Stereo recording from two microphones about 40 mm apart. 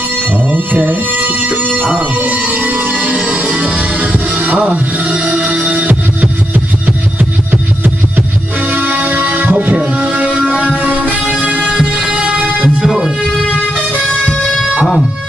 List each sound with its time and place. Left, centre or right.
0.5 s speech: right
1.6 s music: right
7.2 s music: right
9.9 s music: right
11.8 s music: right
12.6 s music: centre
13.2 s vehicle: centre